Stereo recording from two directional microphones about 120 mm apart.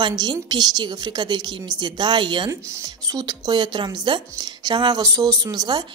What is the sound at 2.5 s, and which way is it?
Speech, 25° right (ahead or behind).